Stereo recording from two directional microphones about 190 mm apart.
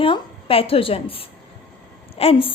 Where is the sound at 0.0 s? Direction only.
30° left (ahead or behind).